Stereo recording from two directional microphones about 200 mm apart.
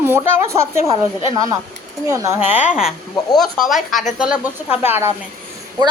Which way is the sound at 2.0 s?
15° right (ahead or behind).